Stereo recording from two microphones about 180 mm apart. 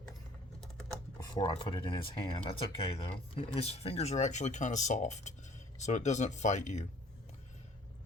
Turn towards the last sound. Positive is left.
turn(degrees=40)  # may be behind; listen again after turning